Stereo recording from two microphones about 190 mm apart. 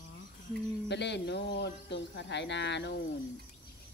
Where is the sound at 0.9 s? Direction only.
65° left (ahead or behind).